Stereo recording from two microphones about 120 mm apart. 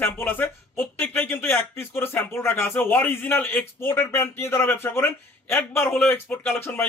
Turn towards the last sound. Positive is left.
turn(degrees=20)  # may be behind; listen again after turning